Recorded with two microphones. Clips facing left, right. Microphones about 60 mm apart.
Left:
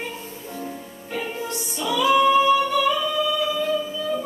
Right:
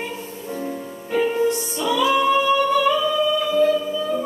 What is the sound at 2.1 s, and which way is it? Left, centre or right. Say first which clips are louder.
Singing: left 4 dB; centre.